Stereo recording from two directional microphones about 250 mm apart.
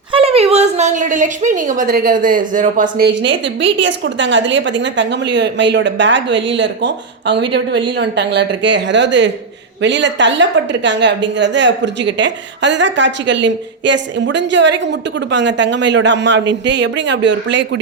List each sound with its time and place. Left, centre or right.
0.1 s a woman's voice: right
3.0 s a woman's voice: right